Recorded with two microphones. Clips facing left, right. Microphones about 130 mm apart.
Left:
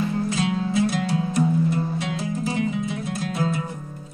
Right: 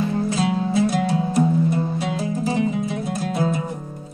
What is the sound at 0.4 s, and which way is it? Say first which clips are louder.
Music: right 2 dB; 35° right (ahead or behind).